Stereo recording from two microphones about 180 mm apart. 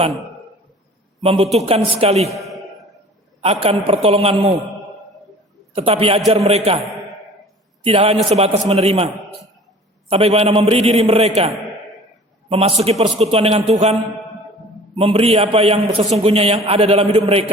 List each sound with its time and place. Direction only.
1.2 s a man's voice: 30° right (ahead or behind)
2.3 s a sound: centre (ahead or behind)
3.4 s a man's voice: 35° right (ahead or behind)
5.7 s a man's voice: 35° right (ahead or behind)
7.9 s a man's voice: 35° right (ahead or behind)
10.1 s a man's voice: 35° right (ahead or behind)
14.9 s a man's voice: 30° right (ahead or behind)